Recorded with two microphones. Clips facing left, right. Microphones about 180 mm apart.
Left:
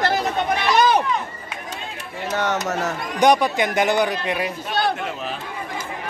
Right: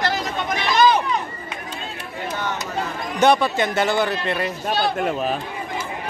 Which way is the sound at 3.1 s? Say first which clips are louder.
Even; 15° left (ahead or behind).